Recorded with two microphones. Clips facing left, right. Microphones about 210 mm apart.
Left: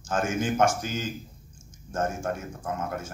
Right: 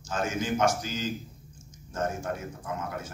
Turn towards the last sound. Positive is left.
turn(degrees=50)  # may be behind; listen again after turning